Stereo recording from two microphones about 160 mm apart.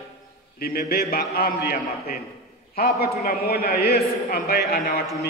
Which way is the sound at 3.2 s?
75° left (ahead or behind).